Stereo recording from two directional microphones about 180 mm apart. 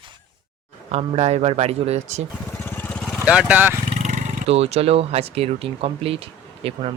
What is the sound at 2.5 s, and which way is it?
Vehicle, 10° left (ahead or behind).